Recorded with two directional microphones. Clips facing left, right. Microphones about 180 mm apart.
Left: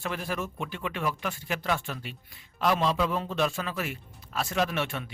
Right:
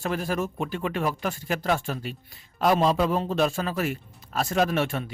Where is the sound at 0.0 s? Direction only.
40° right (ahead or behind).